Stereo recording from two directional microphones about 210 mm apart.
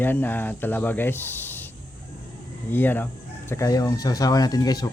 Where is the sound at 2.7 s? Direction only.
10° left (ahead or behind).